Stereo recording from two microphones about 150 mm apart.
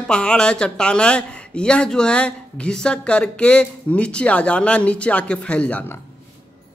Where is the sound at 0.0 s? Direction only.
5° left (ahead or behind).